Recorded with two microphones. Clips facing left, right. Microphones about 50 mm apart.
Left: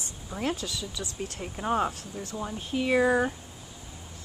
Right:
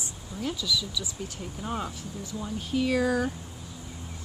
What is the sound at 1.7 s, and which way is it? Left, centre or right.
Speech, left.